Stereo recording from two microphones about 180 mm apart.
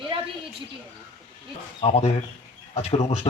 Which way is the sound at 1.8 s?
35° left (ahead or behind).